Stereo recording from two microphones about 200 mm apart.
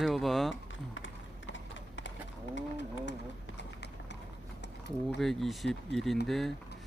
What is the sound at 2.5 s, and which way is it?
Speech, 60° left (ahead or behind).